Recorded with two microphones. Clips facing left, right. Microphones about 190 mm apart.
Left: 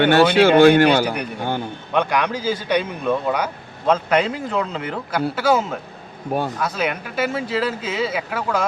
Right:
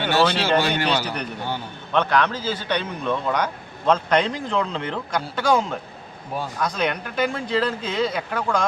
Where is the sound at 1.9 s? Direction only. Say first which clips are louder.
Even; 10° left (ahead or behind).